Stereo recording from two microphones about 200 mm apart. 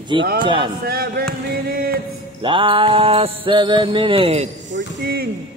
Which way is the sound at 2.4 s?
25° right (ahead or behind).